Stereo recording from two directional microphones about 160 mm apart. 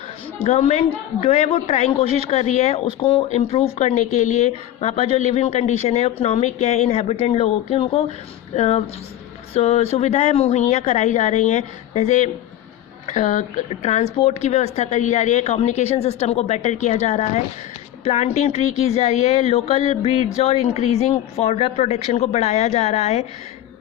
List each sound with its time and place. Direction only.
0.4 s speech: 45° left (ahead or behind)